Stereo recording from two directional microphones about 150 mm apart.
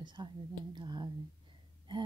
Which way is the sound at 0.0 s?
30° right (ahead or behind).